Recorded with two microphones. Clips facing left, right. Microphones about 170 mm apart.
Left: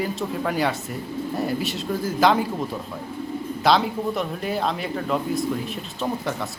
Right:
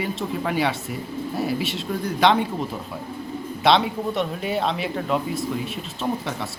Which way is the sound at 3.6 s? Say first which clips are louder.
Right 1 dB; centre (ahead or behind).